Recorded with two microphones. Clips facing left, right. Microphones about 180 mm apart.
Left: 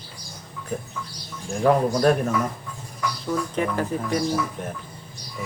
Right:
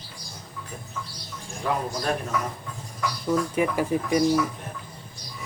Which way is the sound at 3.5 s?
10° right (ahead or behind).